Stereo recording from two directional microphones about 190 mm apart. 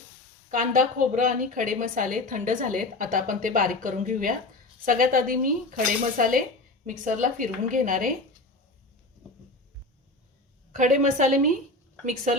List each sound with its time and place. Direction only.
0.5 s a woman's voice: 45° right (ahead or behind)
10.7 s a woman's voice: 45° right (ahead or behind)